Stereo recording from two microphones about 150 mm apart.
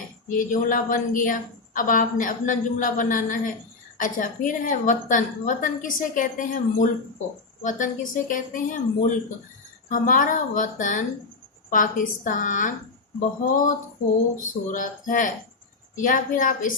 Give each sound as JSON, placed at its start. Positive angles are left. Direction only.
{"t": 0.3, "sound": "a woman's voice", "side_deg": 60}